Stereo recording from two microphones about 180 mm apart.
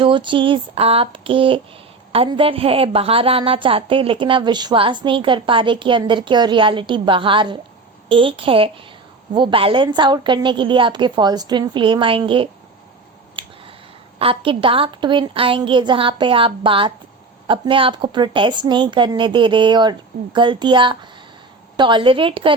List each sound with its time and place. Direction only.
0.0 s a woman's voice: 25° right (ahead or behind)
13.4 s a sound: 30° right (ahead or behind)
14.2 s a woman's voice: 30° right (ahead or behind)